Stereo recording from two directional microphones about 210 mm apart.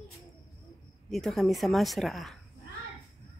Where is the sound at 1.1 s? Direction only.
Centre (ahead or behind).